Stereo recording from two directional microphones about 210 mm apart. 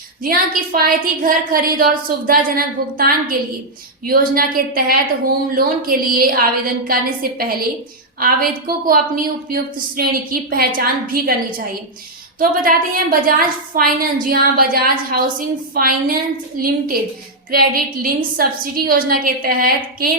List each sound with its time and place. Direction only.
0.2 s a woman's voice: 45° right (ahead or behind)